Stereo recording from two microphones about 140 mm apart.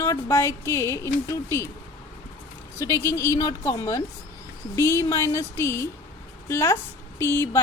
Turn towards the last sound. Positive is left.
turn(degrees=20)  # may be behind; listen again after turning